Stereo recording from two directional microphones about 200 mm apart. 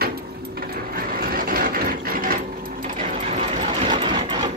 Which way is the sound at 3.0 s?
30° right (ahead or behind).